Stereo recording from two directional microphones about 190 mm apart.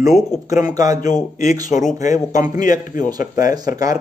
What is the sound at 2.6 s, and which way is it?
Speech, 45° left (ahead or behind).